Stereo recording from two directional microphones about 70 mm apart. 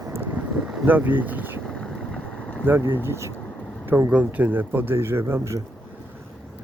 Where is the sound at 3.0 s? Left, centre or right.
Right.